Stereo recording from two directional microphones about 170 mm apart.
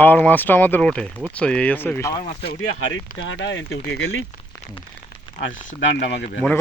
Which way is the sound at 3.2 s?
90° left.